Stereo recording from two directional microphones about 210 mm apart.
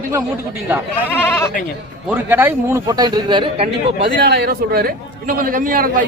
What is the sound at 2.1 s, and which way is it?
Speech, 10° right (ahead or behind).